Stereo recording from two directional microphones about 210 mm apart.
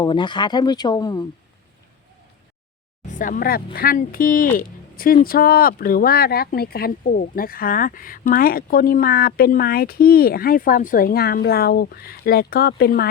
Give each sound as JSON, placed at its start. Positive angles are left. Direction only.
{"t": 0.0, "sound": "speech", "side_deg": 20}
{"t": 3.1, "sound": "speech", "side_deg": 40}